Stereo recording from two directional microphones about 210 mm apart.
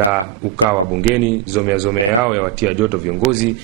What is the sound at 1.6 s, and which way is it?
Speech, 5° right (ahead or behind).